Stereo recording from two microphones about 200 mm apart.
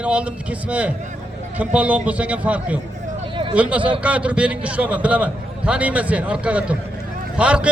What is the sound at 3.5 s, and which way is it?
A man's voice, 5° right (ahead or behind).